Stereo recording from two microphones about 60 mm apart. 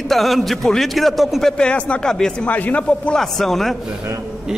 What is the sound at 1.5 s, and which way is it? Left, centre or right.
Speech, centre.